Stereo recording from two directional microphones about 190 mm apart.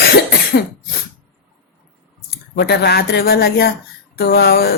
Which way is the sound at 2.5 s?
55° left (ahead or behind).